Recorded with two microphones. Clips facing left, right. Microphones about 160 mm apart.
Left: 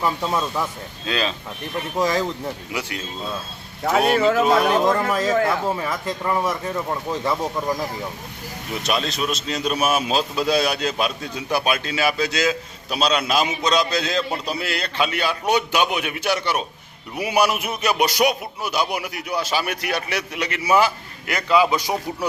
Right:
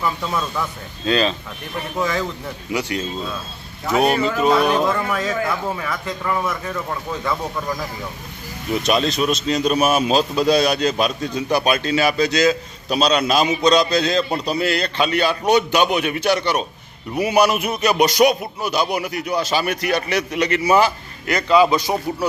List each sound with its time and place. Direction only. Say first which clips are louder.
0.0 s speech: left 1 dB; 30° left (ahead or behind)
1.0 s music: right 6 dB; 5° left (ahead or behind)
2.0 s a man's voice: left 1 dB; 35° left (ahead or behind)
4.4 s a man's voice: right 1 dB; 45° left (ahead or behind); by 7.9 s 25° left (ahead or behind)
8.7 s a man's voice: right 6 dB; centre (ahead or behind)
13.7 s music: right 5 dB; 5° left (ahead or behind)